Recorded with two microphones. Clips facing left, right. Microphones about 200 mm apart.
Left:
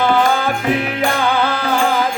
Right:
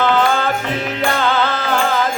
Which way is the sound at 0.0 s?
10° left (ahead or behind).